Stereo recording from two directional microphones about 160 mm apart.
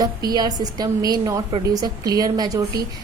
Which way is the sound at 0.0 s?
25° right (ahead or behind).